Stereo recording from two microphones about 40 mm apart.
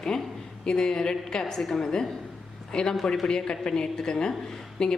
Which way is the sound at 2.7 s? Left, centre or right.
Centre.